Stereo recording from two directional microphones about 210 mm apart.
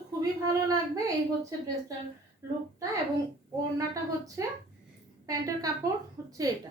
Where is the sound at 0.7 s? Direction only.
15° right (ahead or behind).